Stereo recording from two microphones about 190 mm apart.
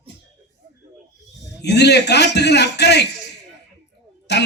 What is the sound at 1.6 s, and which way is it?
A man's voice, 65° left (ahead or behind).